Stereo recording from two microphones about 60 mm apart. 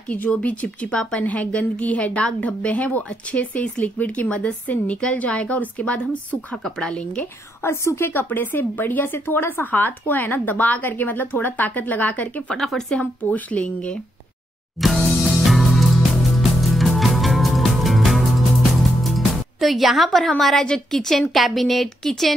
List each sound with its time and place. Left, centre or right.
0.1 s a woman's voice: left
6.5 s speech: centre
7.6 s a woman's voice: left
8.1 s a woman's voice: left
12.5 s a woman's voice: centre
12.9 s a woman's voice: left
15.0 s music: centre
20.6 s a woman's voice: centre